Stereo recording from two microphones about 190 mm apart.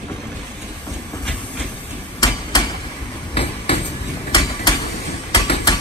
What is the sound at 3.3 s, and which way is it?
Hammer, 30° left (ahead or behind).